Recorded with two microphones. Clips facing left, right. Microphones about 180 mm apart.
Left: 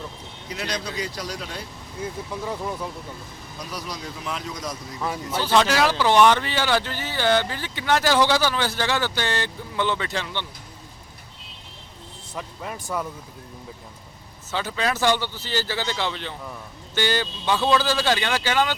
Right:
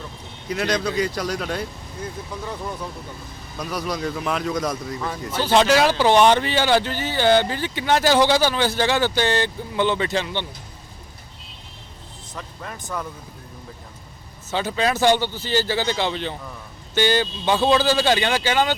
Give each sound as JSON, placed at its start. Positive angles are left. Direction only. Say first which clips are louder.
{"t": 0.4, "sound": "speech", "louder": "right 7 dB", "side_deg": -50}
{"t": 2.0, "sound": "speech", "louder": "left 1 dB", "side_deg": 5}
{"t": 3.6, "sound": "speech", "louder": "right 8 dB", "side_deg": -55}
{"t": 5.0, "sound": "speech", "louder": "left 4 dB", "side_deg": 10}
{"t": 5.4, "sound": "speech", "louder": "right 3 dB", "side_deg": -20}
{"t": 12.3, "sound": "speech", "louder": "left 2 dB", "side_deg": 10}
{"t": 14.5, "sound": "speech", "louder": "right 4 dB", "side_deg": -20}